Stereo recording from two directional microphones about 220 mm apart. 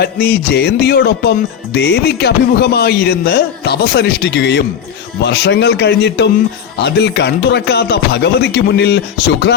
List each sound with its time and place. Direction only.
0.0 s speech: 45° left (ahead or behind)